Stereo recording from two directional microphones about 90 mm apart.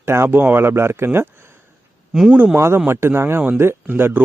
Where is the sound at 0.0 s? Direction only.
30° right (ahead or behind).